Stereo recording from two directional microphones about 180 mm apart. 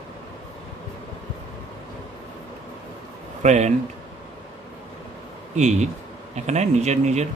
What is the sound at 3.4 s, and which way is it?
Speech, 40° right (ahead or behind).